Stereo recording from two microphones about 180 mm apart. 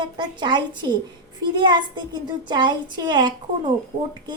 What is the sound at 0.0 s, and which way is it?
A woman's voice, 25° right (ahead or behind).